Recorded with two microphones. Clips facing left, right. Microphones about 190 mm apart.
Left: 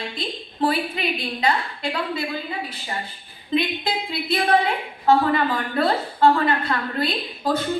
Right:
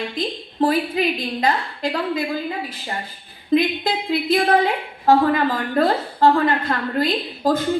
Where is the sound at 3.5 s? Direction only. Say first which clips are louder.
Right 5 dB; 45° right (ahead or behind).